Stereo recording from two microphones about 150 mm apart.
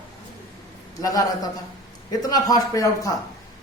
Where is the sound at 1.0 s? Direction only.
25° left (ahead or behind).